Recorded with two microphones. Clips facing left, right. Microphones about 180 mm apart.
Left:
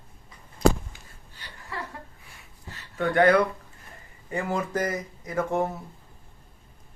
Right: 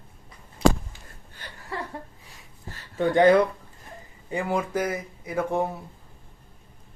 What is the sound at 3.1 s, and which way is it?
Speech, 20° right (ahead or behind).